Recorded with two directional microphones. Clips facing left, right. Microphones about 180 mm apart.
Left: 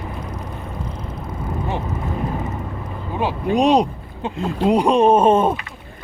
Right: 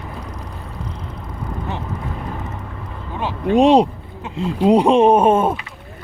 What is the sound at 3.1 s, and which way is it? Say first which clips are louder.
Speech: right 1 dB; 10° left (ahead or behind).